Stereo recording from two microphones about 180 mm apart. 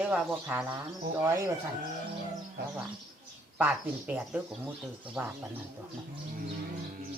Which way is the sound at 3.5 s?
10° right (ahead or behind).